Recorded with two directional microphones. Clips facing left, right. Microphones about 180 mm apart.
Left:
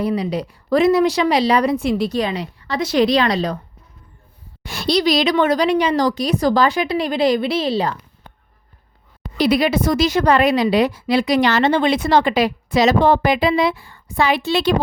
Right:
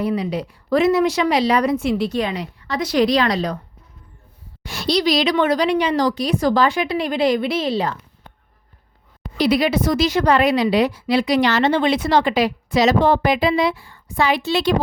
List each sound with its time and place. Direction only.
0.0 s a woman's voice: 35° left (ahead or behind)
4.6 s a woman's voice: 55° left (ahead or behind); by 7.9 s 35° left (ahead or behind)
9.4 s a woman's voice: 50° left (ahead or behind)